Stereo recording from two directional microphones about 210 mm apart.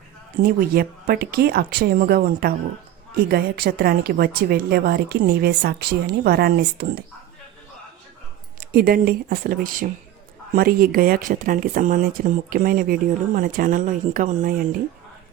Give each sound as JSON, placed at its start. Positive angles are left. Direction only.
{"t": 0.4, "sound": "a woman's voice", "side_deg": -45}
{"t": 8.7, "sound": "a woman's voice", "side_deg": -45}